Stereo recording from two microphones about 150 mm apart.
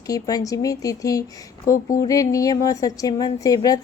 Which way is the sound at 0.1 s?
25° left (ahead or behind).